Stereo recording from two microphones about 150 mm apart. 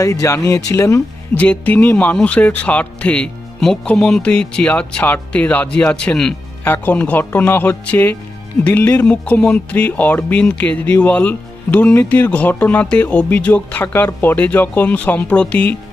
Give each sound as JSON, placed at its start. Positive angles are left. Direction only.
{"t": 0.0, "sound": "speech", "side_deg": 20}
{"t": 1.4, "sound": "speech", "side_deg": 10}